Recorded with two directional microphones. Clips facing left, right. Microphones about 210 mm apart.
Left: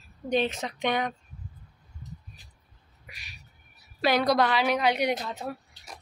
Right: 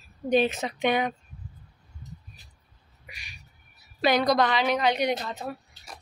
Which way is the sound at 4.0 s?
5° left (ahead or behind).